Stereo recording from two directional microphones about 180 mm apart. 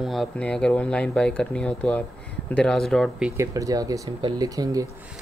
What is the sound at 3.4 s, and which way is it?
Speech, 20° right (ahead or behind).